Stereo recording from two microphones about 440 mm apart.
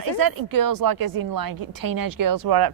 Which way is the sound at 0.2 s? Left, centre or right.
Right.